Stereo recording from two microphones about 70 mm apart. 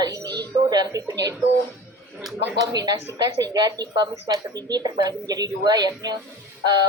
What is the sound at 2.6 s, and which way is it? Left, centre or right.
Speech, right.